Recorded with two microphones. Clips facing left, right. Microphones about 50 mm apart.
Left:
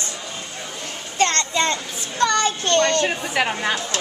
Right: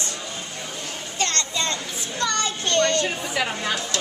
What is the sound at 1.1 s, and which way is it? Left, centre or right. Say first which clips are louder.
A child's voice: left 6 dB; left.